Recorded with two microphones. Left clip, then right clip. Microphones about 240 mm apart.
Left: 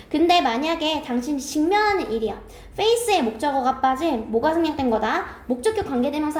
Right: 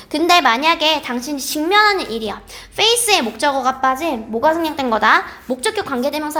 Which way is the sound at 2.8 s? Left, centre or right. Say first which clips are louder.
Right 5 dB; right.